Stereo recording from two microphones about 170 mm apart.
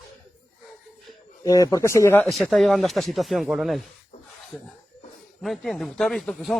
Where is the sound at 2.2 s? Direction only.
Centre (ahead or behind).